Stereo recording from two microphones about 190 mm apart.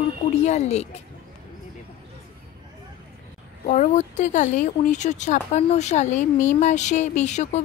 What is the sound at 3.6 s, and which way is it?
Speech, 40° left (ahead or behind).